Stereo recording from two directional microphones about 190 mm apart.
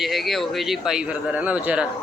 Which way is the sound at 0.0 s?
Centre (ahead or behind).